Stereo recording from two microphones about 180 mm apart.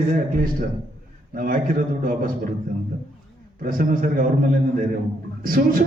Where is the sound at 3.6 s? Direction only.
50° right (ahead or behind).